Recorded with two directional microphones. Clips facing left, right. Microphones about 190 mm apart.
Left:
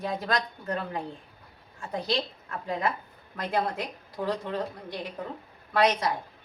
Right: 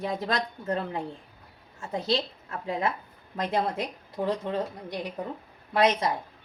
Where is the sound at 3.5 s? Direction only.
25° right (ahead or behind).